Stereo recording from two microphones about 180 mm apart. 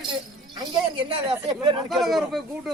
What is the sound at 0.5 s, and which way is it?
A woman's voice, 25° right (ahead or behind).